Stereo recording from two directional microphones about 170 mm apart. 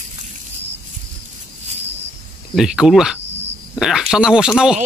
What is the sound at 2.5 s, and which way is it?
Speech, 5° right (ahead or behind).